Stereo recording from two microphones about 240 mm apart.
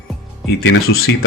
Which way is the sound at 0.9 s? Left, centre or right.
Left.